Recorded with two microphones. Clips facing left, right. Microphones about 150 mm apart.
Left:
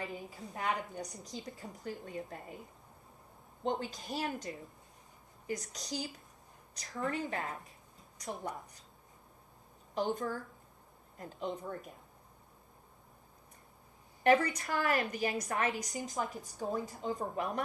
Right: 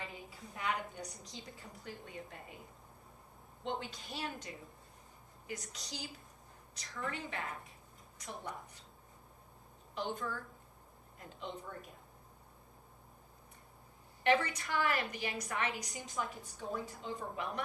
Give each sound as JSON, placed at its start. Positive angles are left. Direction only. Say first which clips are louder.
{"t": 0.0, "sound": "a woman's voice", "louder": "left 6 dB", "side_deg": 45}
{"t": 3.6, "sound": "a woman's voice", "louder": "left 5 dB", "side_deg": 40}
{"t": 9.9, "sound": "a woman's voice", "louder": "left 5 dB", "side_deg": 40}
{"t": 14.3, "sound": "a woman's voice", "louder": "left 4 dB", "side_deg": 40}